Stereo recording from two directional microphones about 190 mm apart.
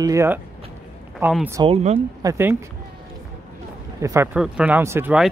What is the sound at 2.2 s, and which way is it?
Speech, 15° right (ahead or behind).